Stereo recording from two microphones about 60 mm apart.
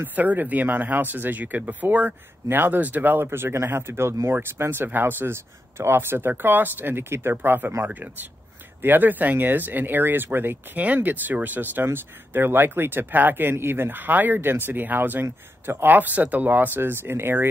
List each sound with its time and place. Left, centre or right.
0.0 s speech: right